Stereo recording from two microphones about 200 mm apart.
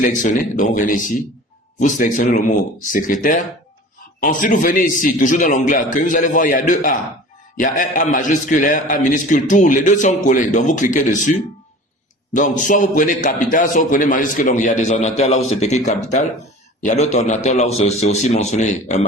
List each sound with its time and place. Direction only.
0.0 s a man's voice: 40° left (ahead or behind)